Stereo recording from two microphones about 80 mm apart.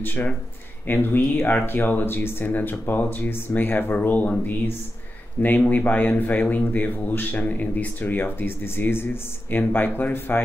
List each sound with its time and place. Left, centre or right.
0.0 s speech: left